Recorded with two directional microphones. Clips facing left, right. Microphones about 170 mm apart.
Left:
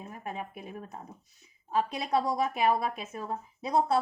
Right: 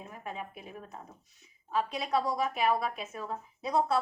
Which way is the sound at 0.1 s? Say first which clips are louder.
Left 2 dB; 45° left (ahead or behind).